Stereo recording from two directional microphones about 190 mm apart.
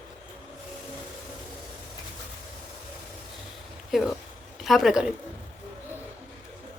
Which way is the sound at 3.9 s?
Centre (ahead or behind).